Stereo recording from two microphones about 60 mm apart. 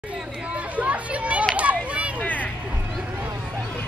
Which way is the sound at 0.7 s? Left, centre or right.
Right.